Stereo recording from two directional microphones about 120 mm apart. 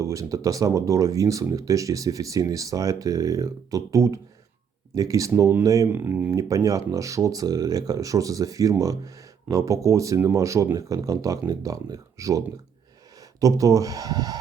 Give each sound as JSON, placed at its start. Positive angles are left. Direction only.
{"t": 0.0, "sound": "speech", "side_deg": -25}
{"t": 5.9, "sound": "speech", "side_deg": -15}
{"t": 6.3, "sound": "speech", "side_deg": -25}
{"t": 13.4, "sound": "speech", "side_deg": -30}